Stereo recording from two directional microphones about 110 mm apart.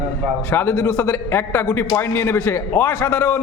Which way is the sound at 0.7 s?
30° left (ahead or behind).